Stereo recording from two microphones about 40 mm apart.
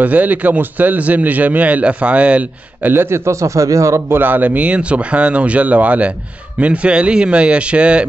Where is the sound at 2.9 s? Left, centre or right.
Right.